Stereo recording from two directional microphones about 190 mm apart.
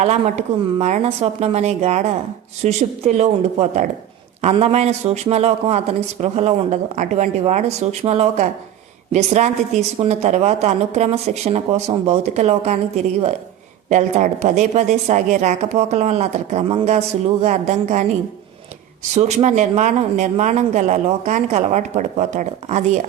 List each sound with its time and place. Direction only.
0.0 s speech: 35° right (ahead or behind)
13.9 s speech: 35° right (ahead or behind)
19.1 s speech: 35° right (ahead or behind)